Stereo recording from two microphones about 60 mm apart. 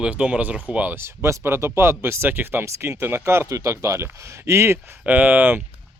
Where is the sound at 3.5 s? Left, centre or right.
Right.